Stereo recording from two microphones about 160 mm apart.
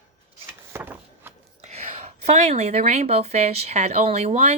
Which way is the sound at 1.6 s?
45° right (ahead or behind).